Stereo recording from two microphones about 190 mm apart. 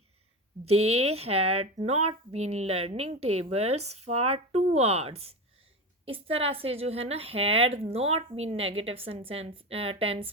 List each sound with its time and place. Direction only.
1.1 s a woman's voice: 30° right (ahead or behind)